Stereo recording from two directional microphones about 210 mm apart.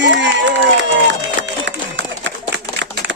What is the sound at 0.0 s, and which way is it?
Crowd, 60° right (ahead or behind).